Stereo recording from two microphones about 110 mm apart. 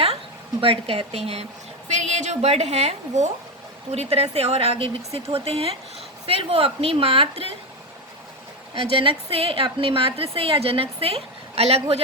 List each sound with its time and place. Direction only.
0.6 s a woman's voice: 55° right (ahead or behind)
1.9 s a woman's voice: 90° right; by 7.4 s 60° right (ahead or behind)
8.7 s a woman's voice: 55° right (ahead or behind)